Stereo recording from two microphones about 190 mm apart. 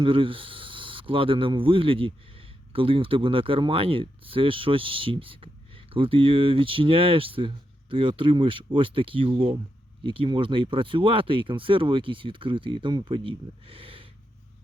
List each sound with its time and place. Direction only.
0.0 s speech: 25° right (ahead or behind)